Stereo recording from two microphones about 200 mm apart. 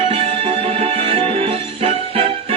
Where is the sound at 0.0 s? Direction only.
30° right (ahead or behind).